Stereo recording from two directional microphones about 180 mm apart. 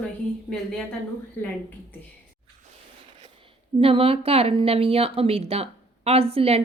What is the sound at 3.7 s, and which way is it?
Speech, 30° right (ahead or behind).